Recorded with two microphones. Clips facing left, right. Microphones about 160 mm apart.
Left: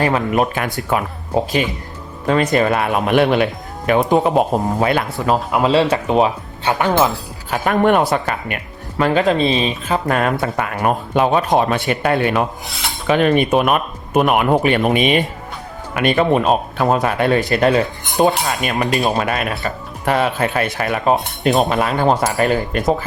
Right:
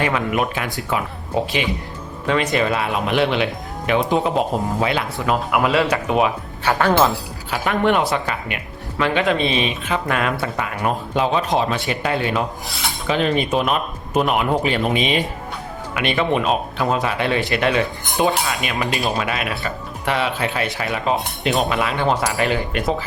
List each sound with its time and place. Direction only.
0.0 s a man's voice: 35° left (ahead or behind)
2.2 s a man's voice: 45° left (ahead or behind)
5.2 s speech: 30° left (ahead or behind)
6.7 s speech: 15° left (ahead or behind)
7.5 s speech: 45° left (ahead or behind)
10.4 s a man's voice: 55° left (ahead or behind)
12.6 s filing: centre (ahead or behind)
13.1 s speech: 55° left (ahead or behind)
16.0 s a man's voice: 45° left (ahead or behind)